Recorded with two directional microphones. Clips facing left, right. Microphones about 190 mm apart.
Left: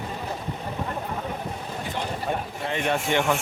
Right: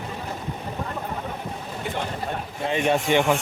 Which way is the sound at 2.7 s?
15° right (ahead or behind).